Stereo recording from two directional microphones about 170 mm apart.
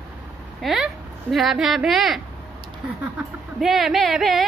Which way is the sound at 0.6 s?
Centre (ahead or behind).